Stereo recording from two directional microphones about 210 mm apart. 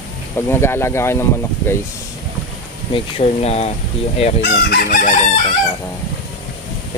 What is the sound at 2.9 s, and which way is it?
Speech, 30° left (ahead or behind).